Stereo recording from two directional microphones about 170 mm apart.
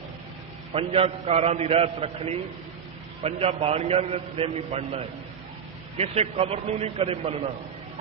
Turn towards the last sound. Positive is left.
turn(degrees=-35)  # may be behind; listen again after turning